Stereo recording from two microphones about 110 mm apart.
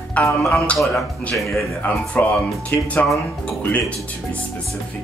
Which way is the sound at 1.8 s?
15° left (ahead or behind).